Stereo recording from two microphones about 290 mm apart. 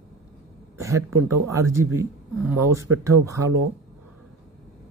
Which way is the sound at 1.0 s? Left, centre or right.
Right.